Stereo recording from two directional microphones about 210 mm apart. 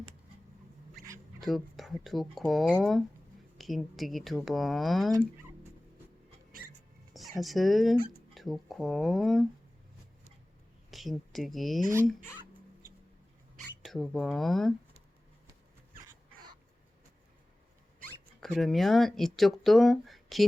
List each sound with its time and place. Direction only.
1.4 s speech: centre (ahead or behind)
7.1 s speech: centre (ahead or behind)
10.9 s speech: centre (ahead or behind)
13.8 s speech: centre (ahead or behind)
18.3 s speech: 5° left (ahead or behind)